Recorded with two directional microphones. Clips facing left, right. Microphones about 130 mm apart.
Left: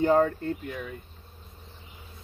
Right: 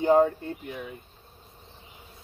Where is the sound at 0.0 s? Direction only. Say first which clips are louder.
Right 1 dB; 15° right (ahead or behind).